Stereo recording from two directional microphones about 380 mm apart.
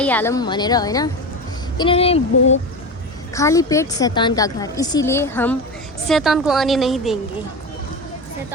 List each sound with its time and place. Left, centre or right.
0.0 s a woman's voice: centre
3.3 s a woman's voice: centre